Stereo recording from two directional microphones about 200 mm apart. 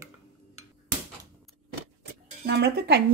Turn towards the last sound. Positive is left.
turn(degrees=-55)  # may be behind; listen again after turning